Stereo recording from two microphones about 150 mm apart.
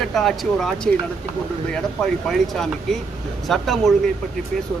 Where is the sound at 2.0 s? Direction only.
Centre (ahead or behind).